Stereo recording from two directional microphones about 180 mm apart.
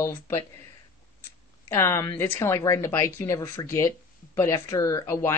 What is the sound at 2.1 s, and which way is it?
Speech, 10° left (ahead or behind).